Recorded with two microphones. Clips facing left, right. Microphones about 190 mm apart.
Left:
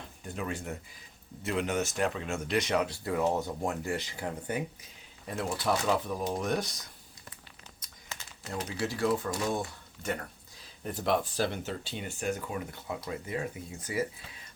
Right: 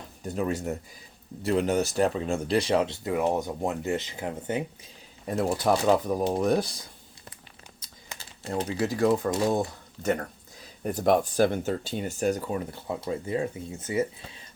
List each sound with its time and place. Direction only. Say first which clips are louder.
0.2 s speech: right 8 dB; 40° right (ahead or behind); by 4.9 s 25° right (ahead or behind)
5.2 s speech: right 7 dB; 40° right (ahead or behind)
8.2 s speech: right 7 dB; 30° right (ahead or behind)